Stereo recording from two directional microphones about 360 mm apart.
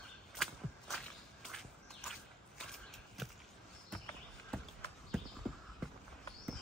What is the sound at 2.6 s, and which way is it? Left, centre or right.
Mechanisms, centre.